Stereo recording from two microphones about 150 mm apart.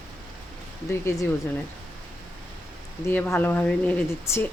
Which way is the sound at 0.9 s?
15° left (ahead or behind).